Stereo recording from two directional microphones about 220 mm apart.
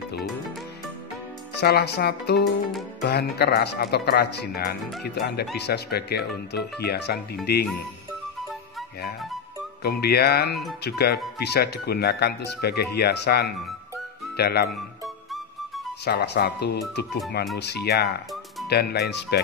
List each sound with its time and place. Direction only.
1.5 s speech: 50° left (ahead or behind)
9.8 s speech: 45° left (ahead or behind)
16.1 s speech: 45° left (ahead or behind)